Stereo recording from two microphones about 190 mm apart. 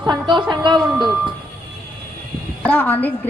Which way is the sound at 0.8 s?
Centre (ahead or behind).